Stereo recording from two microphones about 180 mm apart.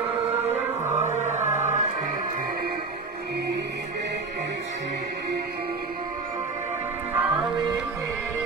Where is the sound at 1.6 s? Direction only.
40° right (ahead or behind).